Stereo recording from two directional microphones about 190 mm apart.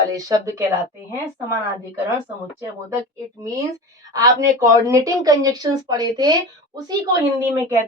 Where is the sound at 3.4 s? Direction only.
15° right (ahead or behind).